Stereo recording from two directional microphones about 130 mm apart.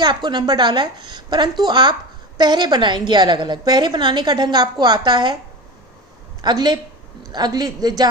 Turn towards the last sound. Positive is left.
turn(degrees=-30)  # may be behind; listen again after turning